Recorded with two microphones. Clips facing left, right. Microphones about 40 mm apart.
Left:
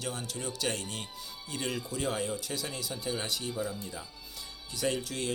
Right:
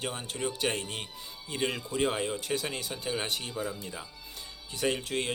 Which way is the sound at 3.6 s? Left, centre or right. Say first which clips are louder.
Even; right.